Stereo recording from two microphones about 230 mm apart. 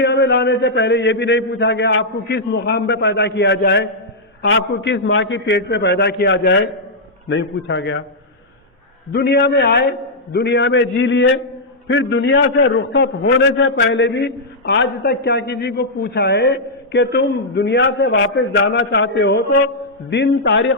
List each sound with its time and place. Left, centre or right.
0.0 s a man's voice: left
9.1 s a man's voice: left